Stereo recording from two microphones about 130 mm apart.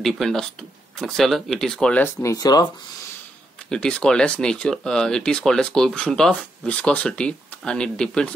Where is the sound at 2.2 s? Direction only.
25° left (ahead or behind).